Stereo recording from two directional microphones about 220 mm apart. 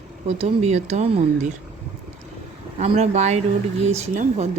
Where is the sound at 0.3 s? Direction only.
30° right (ahead or behind).